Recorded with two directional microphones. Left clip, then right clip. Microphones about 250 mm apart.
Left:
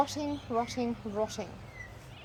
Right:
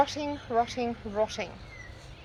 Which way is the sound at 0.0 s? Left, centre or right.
Centre.